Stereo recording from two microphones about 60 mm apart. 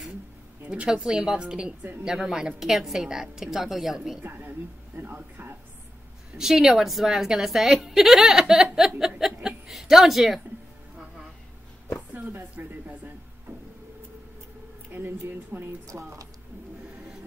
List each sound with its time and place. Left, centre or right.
0.7 s a woman's voice: centre
4.2 s speech: right
6.3 s speech: centre
8.7 s chuckle: centre
12.1 s a sound: right
12.5 s speech: right
14.9 s speech: right
15.9 s speech: right